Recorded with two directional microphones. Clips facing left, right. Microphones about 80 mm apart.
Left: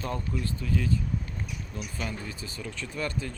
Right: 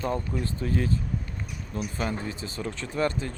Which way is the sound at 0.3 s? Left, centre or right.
Right.